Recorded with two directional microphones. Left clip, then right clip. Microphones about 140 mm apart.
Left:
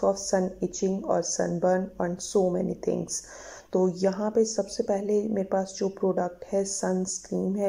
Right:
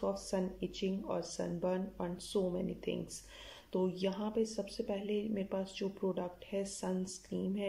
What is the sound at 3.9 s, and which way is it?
Speech, 25° right (ahead or behind).